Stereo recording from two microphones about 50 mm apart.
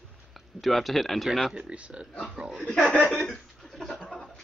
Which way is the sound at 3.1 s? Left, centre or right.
Centre.